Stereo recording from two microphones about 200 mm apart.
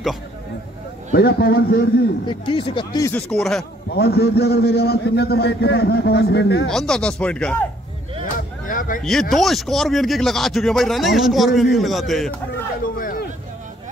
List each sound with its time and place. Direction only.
1.1 s a man's voice: 50° left (ahead or behind)
2.2 s speech: 25° left (ahead or behind)
3.1 s speech: 5° left (ahead or behind)
3.9 s a man's voice: 55° left (ahead or behind)
6.7 s speech: 5° left (ahead or behind)
8.6 s a sound: 40° left (ahead or behind)
9.3 s speech: centre (ahead or behind)
12.8 s a sound: 45° left (ahead or behind)